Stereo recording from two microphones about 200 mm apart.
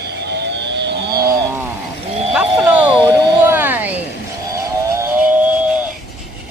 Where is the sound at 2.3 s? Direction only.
5° right (ahead or behind).